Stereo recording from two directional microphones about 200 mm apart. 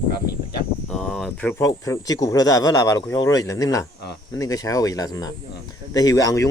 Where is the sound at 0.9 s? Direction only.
Centre (ahead or behind).